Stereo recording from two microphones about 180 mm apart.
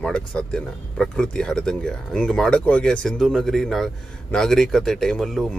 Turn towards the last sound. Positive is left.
turn(degrees=0)  # may be behind; listen again after turning